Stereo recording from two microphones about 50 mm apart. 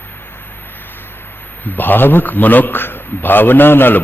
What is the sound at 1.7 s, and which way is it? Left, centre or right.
A man's voice, left.